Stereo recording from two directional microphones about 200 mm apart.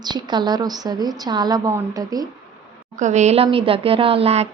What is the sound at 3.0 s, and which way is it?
Speech, 35° right (ahead or behind).